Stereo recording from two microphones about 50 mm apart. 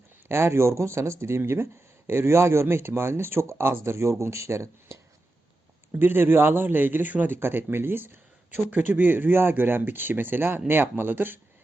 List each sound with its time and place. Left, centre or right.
0.3 s speech: right
6.0 s speech: right
7.3 s speech: right